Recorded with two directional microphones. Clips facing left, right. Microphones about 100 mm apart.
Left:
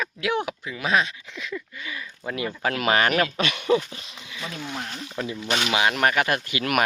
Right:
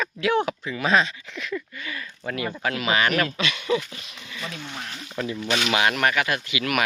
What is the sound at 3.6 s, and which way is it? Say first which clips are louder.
Speech: left 4 dB; 35° left (ahead or behind).